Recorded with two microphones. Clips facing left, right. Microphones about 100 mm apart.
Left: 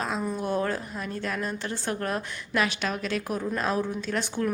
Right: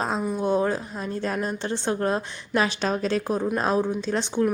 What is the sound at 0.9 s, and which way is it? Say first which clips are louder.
A woman's voice: right 4 dB; 30° right (ahead or behind).